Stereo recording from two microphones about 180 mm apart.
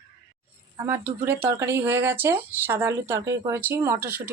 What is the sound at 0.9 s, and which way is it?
Speech, 15° right (ahead or behind).